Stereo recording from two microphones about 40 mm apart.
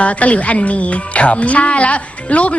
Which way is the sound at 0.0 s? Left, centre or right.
Left.